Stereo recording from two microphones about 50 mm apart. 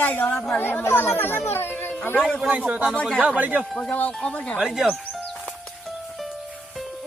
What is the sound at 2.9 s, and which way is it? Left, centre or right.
Speech, centre.